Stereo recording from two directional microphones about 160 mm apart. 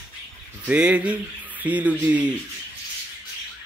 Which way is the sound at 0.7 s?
10° right (ahead or behind).